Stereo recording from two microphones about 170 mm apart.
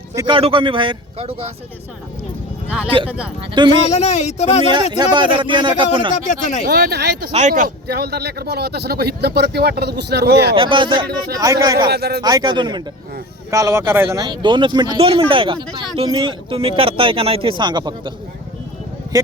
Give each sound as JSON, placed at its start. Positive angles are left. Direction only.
{"t": 0.2, "sound": "speech", "side_deg": -30}
{"t": 2.8, "sound": "speech", "side_deg": -30}
{"t": 3.8, "sound": "speech", "side_deg": 40}
{"t": 4.9, "sound": "speech", "side_deg": -25}
{"t": 6.1, "sound": "speech", "side_deg": 45}
{"t": 6.7, "sound": "speech", "side_deg": -75}
{"t": 7.3, "sound": "speech", "side_deg": -40}
{"t": 7.9, "sound": "speech", "side_deg": -70}
{"t": 10.5, "sound": "speech", "side_deg": -30}
{"t": 11.9, "sound": "speech", "side_deg": -70}
{"t": 12.2, "sound": "speech", "side_deg": -25}
{"t": 19.1, "sound": "speech", "side_deg": -20}